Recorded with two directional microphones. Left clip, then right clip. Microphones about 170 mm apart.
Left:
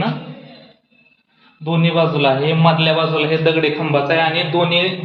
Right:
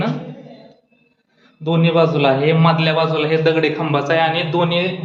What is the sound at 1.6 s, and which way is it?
A man's voice, 15° right (ahead or behind).